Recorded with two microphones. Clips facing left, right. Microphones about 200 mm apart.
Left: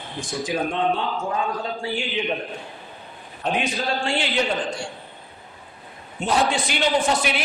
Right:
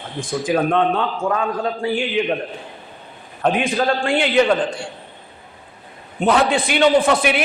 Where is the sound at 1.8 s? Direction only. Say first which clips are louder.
Right 8 dB; 55° right (ahead or behind).